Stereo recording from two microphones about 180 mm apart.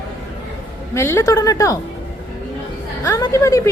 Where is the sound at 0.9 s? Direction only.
15° left (ahead or behind).